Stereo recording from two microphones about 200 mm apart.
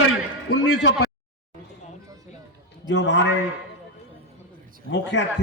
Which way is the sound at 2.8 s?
65° left (ahead or behind).